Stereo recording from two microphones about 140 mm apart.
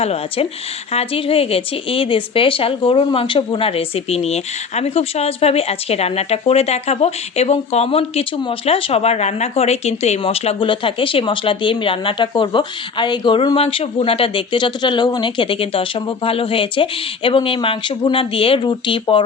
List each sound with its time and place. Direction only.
0.0 s a woman's voice: 45° left (ahead or behind)